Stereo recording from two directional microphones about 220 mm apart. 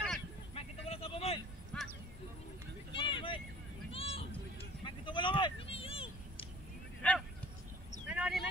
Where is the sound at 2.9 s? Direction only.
25° left (ahead or behind).